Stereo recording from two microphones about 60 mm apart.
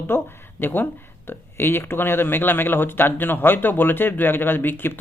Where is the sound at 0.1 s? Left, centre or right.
Left.